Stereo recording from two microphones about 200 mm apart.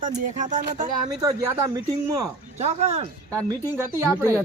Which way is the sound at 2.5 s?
35° right (ahead or behind).